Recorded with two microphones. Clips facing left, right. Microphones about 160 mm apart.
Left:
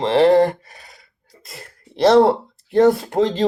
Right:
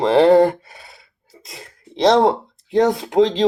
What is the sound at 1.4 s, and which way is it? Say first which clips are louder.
Speech: even; centre (ahead or behind).